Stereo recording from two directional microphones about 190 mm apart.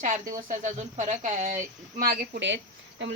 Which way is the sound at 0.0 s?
45° right (ahead or behind).